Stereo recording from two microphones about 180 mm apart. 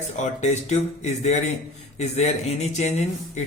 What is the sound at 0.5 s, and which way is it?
Speech, 40° left (ahead or behind).